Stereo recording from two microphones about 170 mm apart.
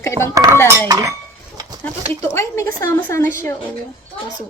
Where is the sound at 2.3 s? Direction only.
15° left (ahead or behind).